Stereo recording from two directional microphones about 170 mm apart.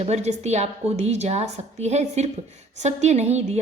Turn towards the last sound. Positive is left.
turn(degrees=-40)  # may be behind; listen again after turning